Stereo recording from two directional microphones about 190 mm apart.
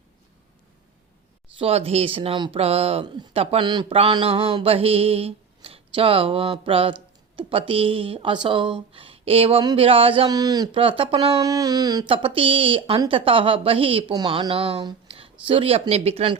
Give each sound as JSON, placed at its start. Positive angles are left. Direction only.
{"t": 1.5, "sound": "speech", "side_deg": -30}